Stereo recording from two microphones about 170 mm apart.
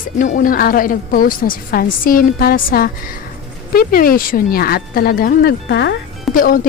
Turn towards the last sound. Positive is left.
turn(degrees=55)  # may be behind; listen again after turning